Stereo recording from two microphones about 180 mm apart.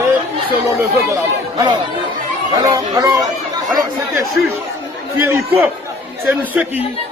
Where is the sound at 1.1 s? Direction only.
25° right (ahead or behind).